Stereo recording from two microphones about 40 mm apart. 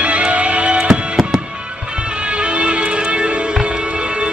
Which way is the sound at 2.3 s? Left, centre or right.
Right.